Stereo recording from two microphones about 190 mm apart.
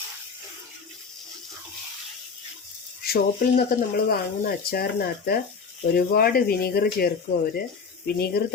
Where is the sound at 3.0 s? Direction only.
55° left (ahead or behind).